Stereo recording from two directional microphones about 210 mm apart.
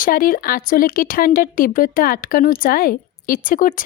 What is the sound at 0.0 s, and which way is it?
Speech, 40° left (ahead or behind).